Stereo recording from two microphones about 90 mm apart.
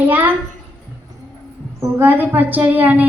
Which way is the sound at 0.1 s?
20° right (ahead or behind).